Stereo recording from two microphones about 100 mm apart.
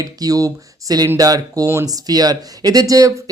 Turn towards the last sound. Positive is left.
turn(degrees=-35)  # may be behind; listen again after turning